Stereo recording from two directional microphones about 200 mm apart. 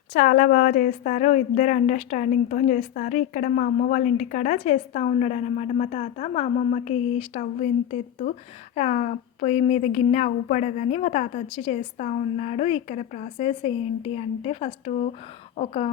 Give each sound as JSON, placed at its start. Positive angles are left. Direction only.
{"t": 0.1, "sound": "speech", "side_deg": 40}